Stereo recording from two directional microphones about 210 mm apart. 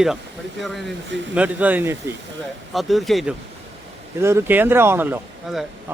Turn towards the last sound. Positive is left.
turn(degrees=-5)  # may be behind; listen again after turning